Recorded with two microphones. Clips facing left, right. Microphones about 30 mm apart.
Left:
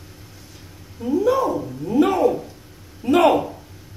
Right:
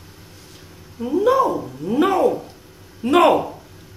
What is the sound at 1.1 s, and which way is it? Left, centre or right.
A woman's voice, right.